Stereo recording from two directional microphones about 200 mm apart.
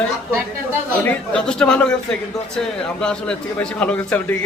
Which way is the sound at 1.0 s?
5° left (ahead or behind).